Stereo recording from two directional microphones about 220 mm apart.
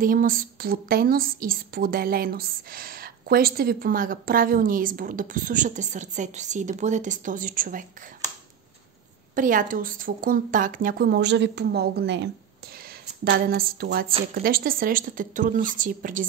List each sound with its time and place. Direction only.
0.0 s a woman's voice: 40° right (ahead or behind)
9.3 s a woman's voice: 35° right (ahead or behind)